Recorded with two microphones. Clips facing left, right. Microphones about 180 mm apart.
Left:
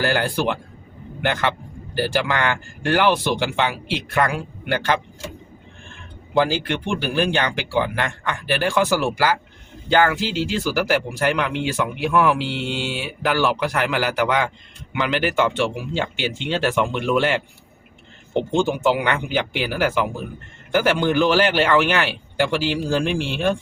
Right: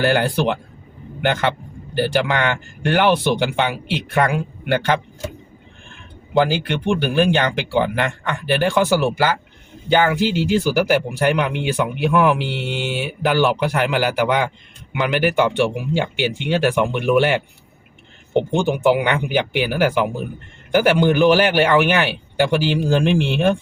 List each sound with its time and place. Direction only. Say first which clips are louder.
0.0 s speech: right 3 dB; 20° right (ahead or behind)
2.0 s speech: right 3 dB; 20° right (ahead or behind)
6.3 s speech: right 2 dB; 20° right (ahead or behind)